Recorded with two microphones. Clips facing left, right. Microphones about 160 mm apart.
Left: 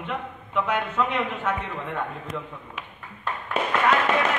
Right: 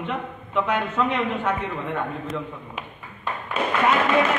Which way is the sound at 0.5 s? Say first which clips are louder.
Right 2 dB; 5° left (ahead or behind).